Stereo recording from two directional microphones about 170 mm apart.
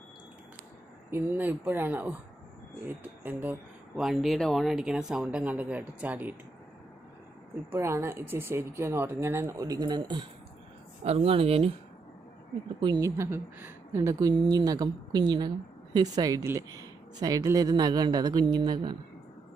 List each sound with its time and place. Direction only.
1.1 s speech: 10° right (ahead or behind)
7.7 s speech: 15° right (ahead or behind)
11.0 s speech: 35° right (ahead or behind)
12.8 s speech: 25° right (ahead or behind)